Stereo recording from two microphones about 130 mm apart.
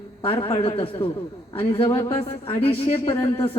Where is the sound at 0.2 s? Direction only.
45° left (ahead or behind).